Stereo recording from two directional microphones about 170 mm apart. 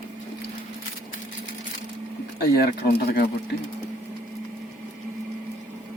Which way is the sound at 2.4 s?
65° left (ahead or behind).